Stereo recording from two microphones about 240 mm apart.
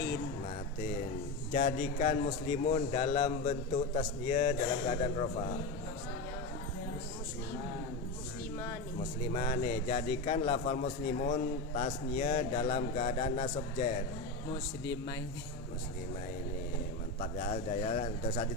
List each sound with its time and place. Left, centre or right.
1.5 s a man's voice: left
9.3 s a man's voice: left
17.2 s a man's voice: left